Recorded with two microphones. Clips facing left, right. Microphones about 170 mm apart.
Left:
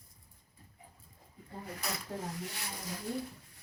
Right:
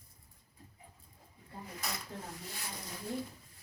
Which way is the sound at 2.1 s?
50° left (ahead or behind).